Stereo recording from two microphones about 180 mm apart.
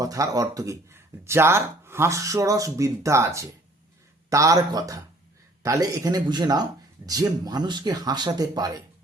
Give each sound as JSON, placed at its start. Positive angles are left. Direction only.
{"t": 0.0, "sound": "speech", "side_deg": -20}